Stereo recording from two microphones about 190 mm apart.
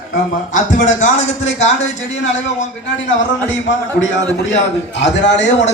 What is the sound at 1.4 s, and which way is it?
Speech, 75° left (ahead or behind).